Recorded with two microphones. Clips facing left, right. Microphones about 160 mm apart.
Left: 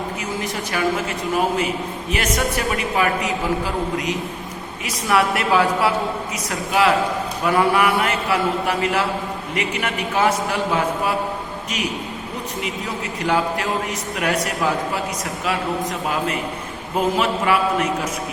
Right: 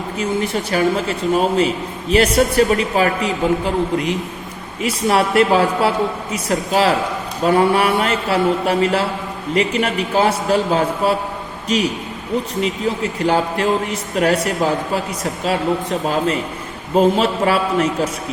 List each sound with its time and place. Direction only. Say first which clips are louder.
0.2 s a man's voice: right 6 dB; 30° right (ahead or behind)
4.8 s a man's voice: right 3 dB; 30° right (ahead or behind)
12.6 s a man's voice: right 7 dB; 30° right (ahead or behind)